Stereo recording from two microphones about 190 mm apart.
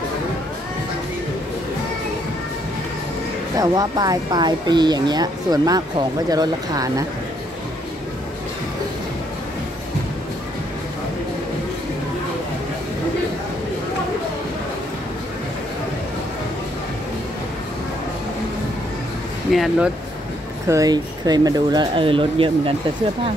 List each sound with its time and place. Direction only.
3.5 s speech: 20° right (ahead or behind)
19.5 s speech: centre (ahead or behind)
20.6 s speech: 15° right (ahead or behind)